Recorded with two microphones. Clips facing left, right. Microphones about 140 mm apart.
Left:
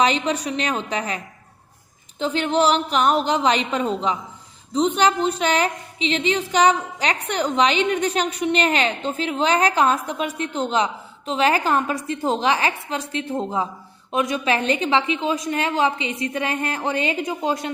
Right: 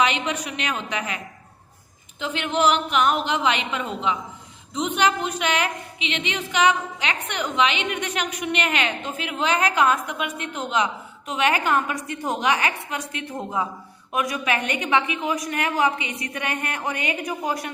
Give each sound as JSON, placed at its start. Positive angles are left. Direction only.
{"t": 0.0, "sound": "a woman's voice", "side_deg": 35}